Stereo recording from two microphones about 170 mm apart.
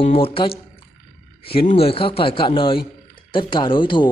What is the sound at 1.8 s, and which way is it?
A man's voice, 30° left (ahead or behind).